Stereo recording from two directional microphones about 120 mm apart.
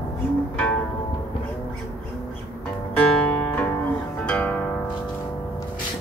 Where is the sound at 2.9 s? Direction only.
10° left (ahead or behind).